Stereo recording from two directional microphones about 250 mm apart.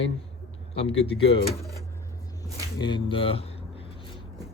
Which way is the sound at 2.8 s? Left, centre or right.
Centre.